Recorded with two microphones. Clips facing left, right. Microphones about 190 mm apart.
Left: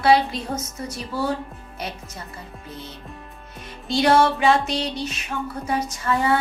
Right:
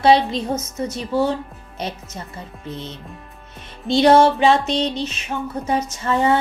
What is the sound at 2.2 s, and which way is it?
Music, 25° right (ahead or behind).